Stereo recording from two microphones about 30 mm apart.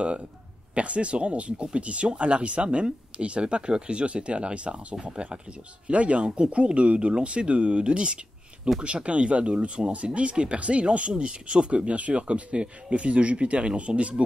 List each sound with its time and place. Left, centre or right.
0.7 s speech: right